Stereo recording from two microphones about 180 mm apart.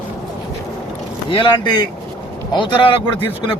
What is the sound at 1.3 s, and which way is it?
Speech, 25° left (ahead or behind).